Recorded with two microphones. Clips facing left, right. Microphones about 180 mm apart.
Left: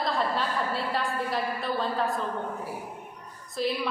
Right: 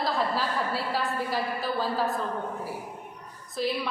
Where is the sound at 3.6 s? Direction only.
Centre (ahead or behind).